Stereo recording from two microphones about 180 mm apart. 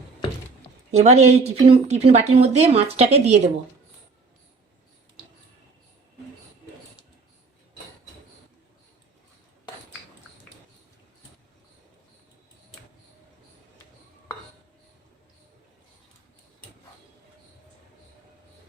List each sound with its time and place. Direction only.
0.9 s speech: 35° right (ahead or behind)